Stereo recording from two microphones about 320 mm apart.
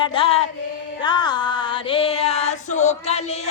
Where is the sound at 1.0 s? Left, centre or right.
Centre.